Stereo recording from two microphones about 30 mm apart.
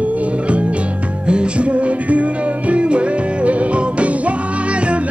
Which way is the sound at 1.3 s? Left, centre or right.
Right.